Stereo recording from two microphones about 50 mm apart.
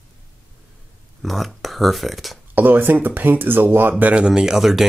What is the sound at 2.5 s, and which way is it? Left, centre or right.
Speech, right.